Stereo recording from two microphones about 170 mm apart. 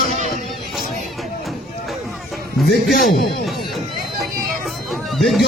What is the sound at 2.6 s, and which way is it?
Speech, 60° left (ahead or behind).